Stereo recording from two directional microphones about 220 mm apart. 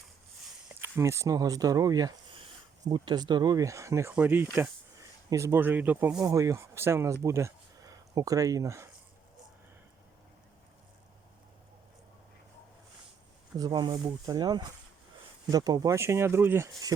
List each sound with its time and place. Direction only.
0.8 s speech: 10° right (ahead or behind)
13.6 s speech: 20° right (ahead or behind)